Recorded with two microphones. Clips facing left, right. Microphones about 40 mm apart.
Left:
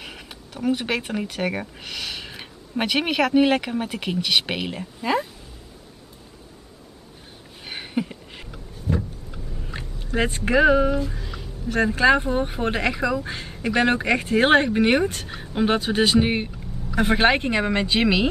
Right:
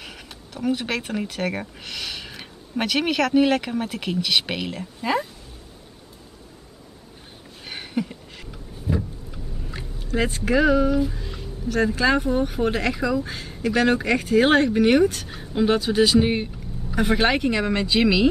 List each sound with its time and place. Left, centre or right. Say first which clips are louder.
0.0 s speech: left 1 dB; centre
7.6 s a sound: even; centre
10.0 s speech: even; left
11.1 s music: right 1 dB; centre
11.7 s speech: left 2 dB; left; by 13.2 s centre
13.2 s speech: right 2 dB; left
16.2 s speech: right 1 dB; centre
17.2 s speech: left 3 dB; left